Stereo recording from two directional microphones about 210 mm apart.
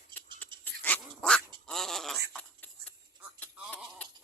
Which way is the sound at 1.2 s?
5° left (ahead or behind).